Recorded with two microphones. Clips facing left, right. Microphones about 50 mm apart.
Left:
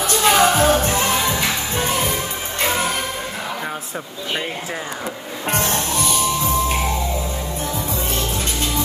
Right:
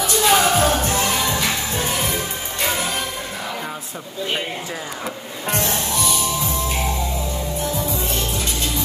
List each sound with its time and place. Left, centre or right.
0.0 s music: left
5.5 s music: left
7.9 s music: left